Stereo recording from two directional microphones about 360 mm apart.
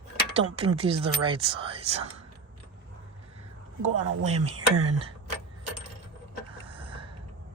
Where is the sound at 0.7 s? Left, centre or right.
Centre.